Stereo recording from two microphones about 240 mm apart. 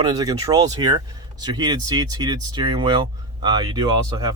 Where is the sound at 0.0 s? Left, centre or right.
Centre.